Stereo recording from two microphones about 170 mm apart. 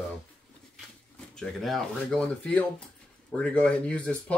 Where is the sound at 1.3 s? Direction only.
5° left (ahead or behind).